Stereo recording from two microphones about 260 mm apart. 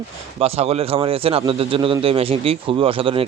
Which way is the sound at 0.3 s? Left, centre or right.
Right.